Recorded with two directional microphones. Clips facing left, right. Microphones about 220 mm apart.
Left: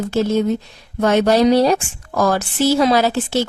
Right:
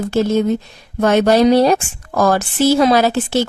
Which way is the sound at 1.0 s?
60° right (ahead or behind).